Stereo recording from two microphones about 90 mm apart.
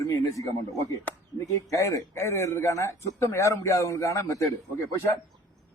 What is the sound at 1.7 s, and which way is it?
A man's voice, 35° left (ahead or behind).